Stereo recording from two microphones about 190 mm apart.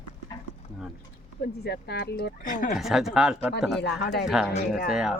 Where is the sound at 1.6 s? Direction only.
60° left (ahead or behind).